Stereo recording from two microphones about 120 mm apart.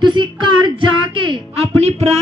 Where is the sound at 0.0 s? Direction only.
40° right (ahead or behind).